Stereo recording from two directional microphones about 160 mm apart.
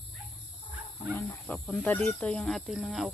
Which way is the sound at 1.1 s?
10° left (ahead or behind).